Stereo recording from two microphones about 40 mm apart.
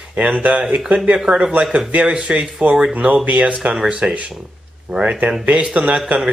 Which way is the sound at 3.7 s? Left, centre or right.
Right.